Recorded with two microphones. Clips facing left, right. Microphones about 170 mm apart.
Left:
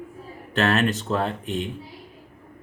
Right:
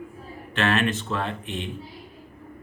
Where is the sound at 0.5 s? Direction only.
40° left (ahead or behind).